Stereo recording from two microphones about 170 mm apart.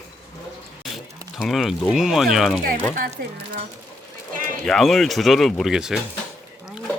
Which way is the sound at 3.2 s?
65° right (ahead or behind).